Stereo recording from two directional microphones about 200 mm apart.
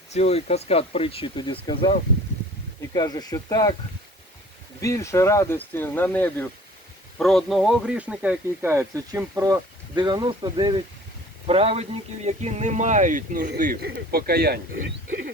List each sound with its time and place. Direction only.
0.1 s speech: 30° left (ahead or behind)
4.8 s speech: 15° left (ahead or behind); by 15.3 s 55° right (ahead or behind)